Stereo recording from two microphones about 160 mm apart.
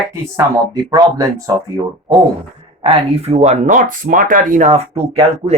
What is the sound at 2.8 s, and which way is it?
Speech, 40° right (ahead or behind).